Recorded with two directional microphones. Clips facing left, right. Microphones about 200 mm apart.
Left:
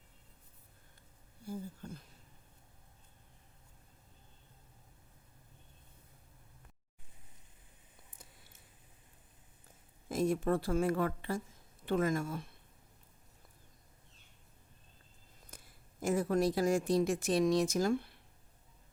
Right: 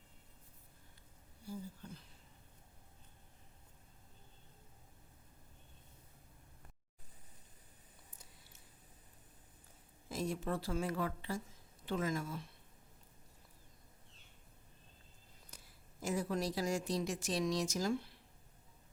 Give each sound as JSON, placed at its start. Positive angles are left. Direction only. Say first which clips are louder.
{"t": 1.5, "sound": "a woman's voice", "louder": "left 4 dB", "side_deg": 45}
{"t": 10.1, "sound": "a woman's voice", "louder": "left 7 dB", "side_deg": 50}
{"t": 15.4, "sound": "speech", "louder": "left 4 dB", "side_deg": 50}